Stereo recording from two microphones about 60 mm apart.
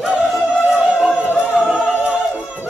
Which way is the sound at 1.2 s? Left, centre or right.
Left.